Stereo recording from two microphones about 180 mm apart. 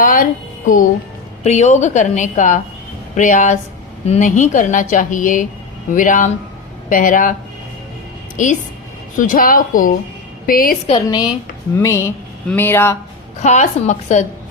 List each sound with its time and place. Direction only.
0.0 s speech: 50° left (ahead or behind)
1.5 s a woman's voice: 40° left (ahead or behind)
8.4 s speech: 45° left (ahead or behind)
10.8 s a woman's voice: 25° left (ahead or behind)
13.4 s a woman's voice: 40° left (ahead or behind)